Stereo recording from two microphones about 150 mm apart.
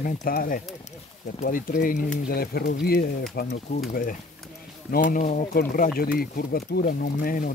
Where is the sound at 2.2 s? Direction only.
85° left.